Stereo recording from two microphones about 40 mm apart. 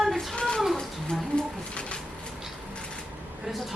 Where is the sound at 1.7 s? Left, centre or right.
Left.